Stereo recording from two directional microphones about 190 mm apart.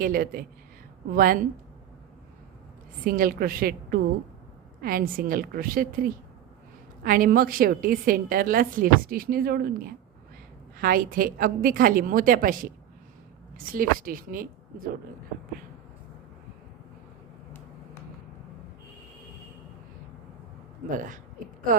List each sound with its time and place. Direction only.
0.0 s a woman's voice: 50° right (ahead or behind)
3.0 s a woman's voice: 50° right (ahead or behind)